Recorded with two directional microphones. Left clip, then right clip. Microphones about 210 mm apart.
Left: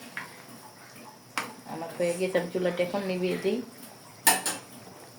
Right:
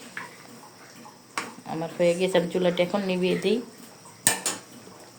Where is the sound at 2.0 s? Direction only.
40° right (ahead or behind).